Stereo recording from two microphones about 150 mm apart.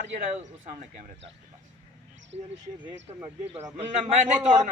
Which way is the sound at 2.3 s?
40° right (ahead or behind).